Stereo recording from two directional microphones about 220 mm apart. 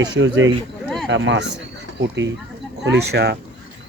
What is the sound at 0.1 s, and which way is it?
Speech, 60° right (ahead or behind).